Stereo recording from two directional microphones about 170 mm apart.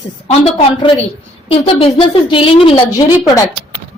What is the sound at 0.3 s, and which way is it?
A woman's voice, 40° left (ahead or behind).